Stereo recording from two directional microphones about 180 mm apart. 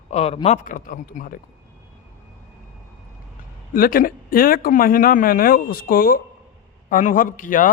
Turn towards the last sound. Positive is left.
turn(degrees=50)  # may be behind; listen again after turning